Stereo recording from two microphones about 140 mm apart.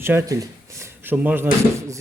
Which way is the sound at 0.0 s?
20° right (ahead or behind).